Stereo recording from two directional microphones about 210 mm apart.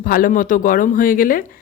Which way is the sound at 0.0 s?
40° left (ahead or behind).